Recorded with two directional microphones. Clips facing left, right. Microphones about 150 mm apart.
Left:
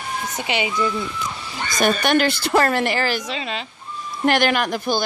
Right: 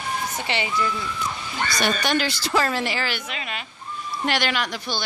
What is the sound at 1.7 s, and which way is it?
Speech, 55° left (ahead or behind).